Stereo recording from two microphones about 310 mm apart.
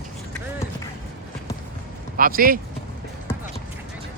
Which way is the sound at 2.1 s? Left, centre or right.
Right.